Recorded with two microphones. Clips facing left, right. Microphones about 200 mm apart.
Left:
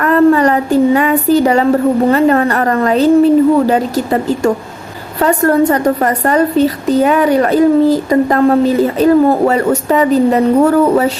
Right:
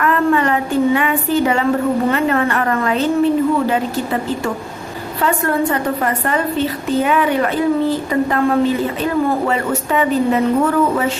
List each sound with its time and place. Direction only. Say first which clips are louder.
0.0 s child singing: left 7 dB; 40° left (ahead or behind)
2.0 s a woman's voice: left 6 dB; 35° left (ahead or behind)